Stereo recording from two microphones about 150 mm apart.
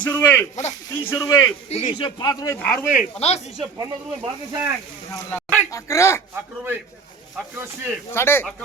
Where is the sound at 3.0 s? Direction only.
45° left (ahead or behind).